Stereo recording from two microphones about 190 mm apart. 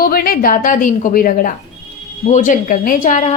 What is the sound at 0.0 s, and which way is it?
A woman's voice, 50° left (ahead or behind).